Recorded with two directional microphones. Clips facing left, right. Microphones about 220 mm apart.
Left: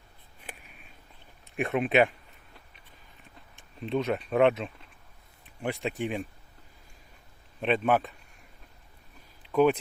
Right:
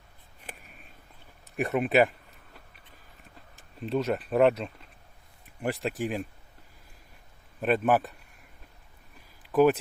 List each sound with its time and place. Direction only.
1.5 s speech: centre (ahead or behind)
3.8 s speech: centre (ahead or behind)
7.6 s speech: 5° right (ahead or behind)
9.5 s speech: 5° right (ahead or behind)